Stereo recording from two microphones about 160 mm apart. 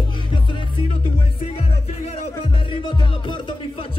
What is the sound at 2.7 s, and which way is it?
Music, 30° left (ahead or behind).